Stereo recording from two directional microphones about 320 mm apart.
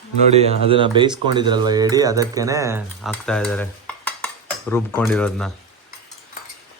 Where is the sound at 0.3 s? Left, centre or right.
Centre.